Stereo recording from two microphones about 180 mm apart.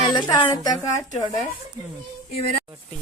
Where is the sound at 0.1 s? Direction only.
25° left (ahead or behind).